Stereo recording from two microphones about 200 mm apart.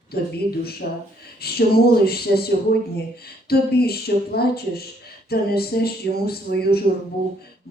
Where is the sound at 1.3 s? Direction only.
50° left (ahead or behind).